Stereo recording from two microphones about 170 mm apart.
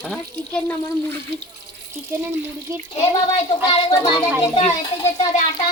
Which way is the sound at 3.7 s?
30° left (ahead or behind).